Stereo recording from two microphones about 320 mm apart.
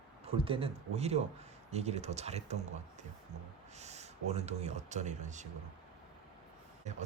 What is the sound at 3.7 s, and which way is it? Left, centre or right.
Speech, right.